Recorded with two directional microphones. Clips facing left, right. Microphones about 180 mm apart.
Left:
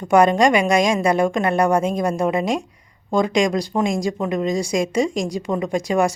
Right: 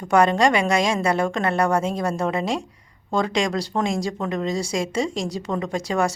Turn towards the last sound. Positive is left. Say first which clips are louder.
# left 4 dB
turn(degrees=15)  # may be behind; listen again after turning